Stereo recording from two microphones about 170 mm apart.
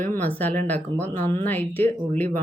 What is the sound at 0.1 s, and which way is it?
Speech, 10° left (ahead or behind).